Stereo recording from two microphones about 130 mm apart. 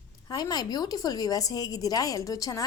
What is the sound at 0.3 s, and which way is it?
A woman's voice, 30° left (ahead or behind).